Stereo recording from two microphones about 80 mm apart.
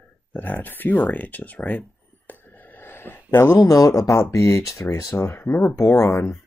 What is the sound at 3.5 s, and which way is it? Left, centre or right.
Speech, left.